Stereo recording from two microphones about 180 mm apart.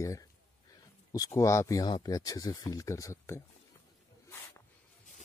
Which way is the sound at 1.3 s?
15° left (ahead or behind).